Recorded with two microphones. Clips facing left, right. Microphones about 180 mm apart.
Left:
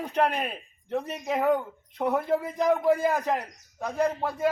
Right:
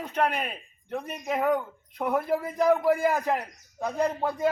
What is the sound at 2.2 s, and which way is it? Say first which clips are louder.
A man's voice: right 1 dB; 10° right (ahead or behind).